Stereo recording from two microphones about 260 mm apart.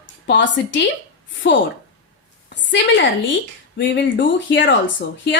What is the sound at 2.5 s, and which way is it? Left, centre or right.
A woman's voice, left.